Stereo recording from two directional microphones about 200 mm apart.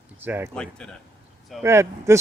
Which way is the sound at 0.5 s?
5° left (ahead or behind).